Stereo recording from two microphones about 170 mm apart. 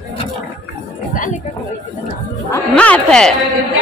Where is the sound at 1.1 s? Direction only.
50° left (ahead or behind).